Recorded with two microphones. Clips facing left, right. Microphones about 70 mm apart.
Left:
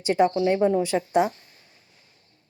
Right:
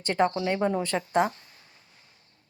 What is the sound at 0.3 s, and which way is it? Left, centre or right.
Speech, right.